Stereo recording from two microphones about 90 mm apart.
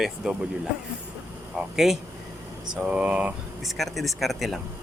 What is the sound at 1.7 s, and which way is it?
A man's voice, 5° right (ahead or behind).